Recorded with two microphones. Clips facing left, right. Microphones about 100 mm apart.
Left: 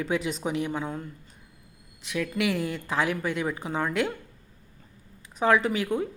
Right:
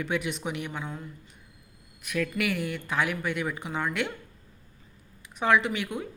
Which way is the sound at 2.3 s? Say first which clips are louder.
Left 2 dB; 30° left (ahead or behind).